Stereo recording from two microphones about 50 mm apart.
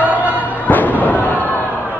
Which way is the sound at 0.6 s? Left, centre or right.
Left.